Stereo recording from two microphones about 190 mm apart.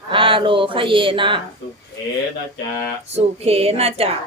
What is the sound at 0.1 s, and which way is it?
Speech, 25° right (ahead or behind).